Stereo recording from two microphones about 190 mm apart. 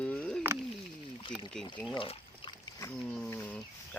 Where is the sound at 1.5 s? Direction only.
5° left (ahead or behind).